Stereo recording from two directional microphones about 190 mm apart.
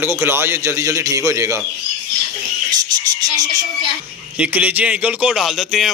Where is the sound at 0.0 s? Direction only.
10° right (ahead or behind).